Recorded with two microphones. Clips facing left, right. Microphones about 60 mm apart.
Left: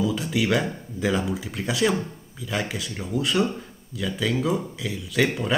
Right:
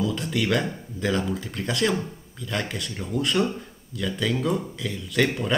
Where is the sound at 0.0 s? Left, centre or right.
Centre.